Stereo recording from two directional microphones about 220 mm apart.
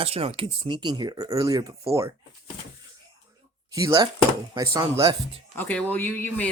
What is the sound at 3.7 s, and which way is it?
Speech, 15° right (ahead or behind).